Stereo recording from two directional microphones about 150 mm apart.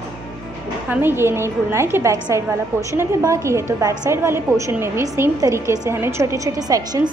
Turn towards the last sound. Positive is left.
turn(degrees=-25)  # may be behind; listen again after turning